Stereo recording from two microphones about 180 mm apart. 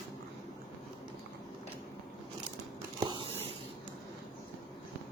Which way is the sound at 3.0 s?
25° right (ahead or behind).